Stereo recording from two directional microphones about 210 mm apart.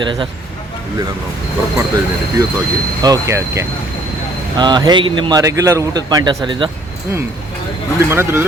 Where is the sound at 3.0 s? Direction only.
15° right (ahead or behind).